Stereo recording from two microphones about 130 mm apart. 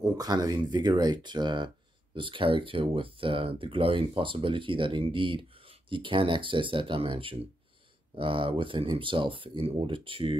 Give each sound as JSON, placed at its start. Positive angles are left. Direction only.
{"t": 0.0, "sound": "speech", "side_deg": -30}